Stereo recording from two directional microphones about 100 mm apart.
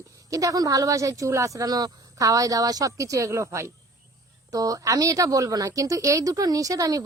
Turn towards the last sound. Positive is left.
turn(degrees=-35)  # may be behind; listen again after turning